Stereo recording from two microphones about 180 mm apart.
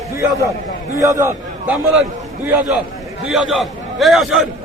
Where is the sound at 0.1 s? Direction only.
15° right (ahead or behind).